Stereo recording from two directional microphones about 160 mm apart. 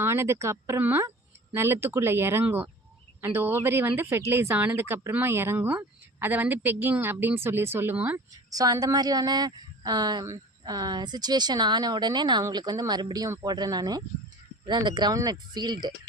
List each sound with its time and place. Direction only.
0.0 s speech: 15° right (ahead or behind)
8.5 s speech: 20° right (ahead or behind)